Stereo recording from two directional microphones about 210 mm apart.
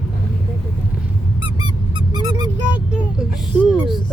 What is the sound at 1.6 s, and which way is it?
Squeak, 20° right (ahead or behind).